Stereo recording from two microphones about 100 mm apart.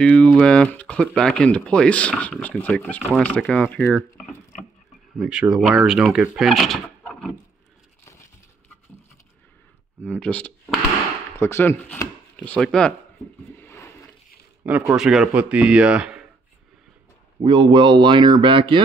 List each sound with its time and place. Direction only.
0.0 s speech: 15° left (ahead or behind)
7.1 s a sound: 10° left (ahead or behind)
8.0 s a sound: 30° left (ahead or behind)
10.0 s speech: 10° left (ahead or behind)
11.3 s speech: 25° left (ahead or behind)
12.5 s speech: 5° left (ahead or behind)
13.6 s a sound: 25° left (ahead or behind)
14.6 s speech: 20° right (ahead or behind)
15.0 s speech: 5° right (ahead or behind)
17.4 s speech: 50° right (ahead or behind)